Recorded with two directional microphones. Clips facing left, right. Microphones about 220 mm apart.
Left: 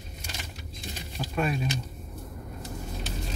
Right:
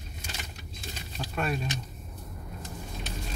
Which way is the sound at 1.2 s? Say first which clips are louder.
Left 4 dB; 10° left (ahead or behind).